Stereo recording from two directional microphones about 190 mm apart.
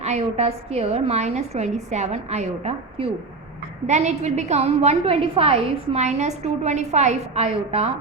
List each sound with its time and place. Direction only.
0.0 s a woman's voice: 35° right (ahead or behind)